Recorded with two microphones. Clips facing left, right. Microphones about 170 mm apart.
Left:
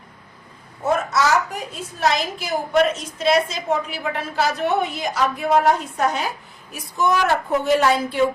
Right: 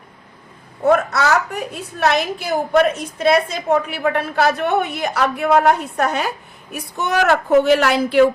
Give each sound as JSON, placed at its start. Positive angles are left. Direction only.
{"t": 0.9, "sound": "a woman's voice", "side_deg": -60}